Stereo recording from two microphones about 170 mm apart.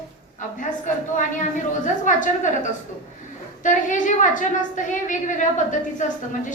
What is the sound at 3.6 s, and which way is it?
A woman's voice, 45° left (ahead or behind).